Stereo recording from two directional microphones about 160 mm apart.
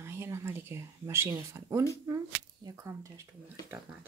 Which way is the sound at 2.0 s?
25° right (ahead or behind).